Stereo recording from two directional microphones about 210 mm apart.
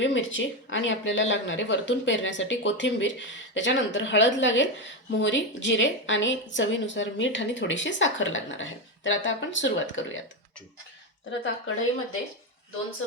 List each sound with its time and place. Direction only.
0.0 s speech: 65° left (ahead or behind)
11.3 s speech: 60° left (ahead or behind)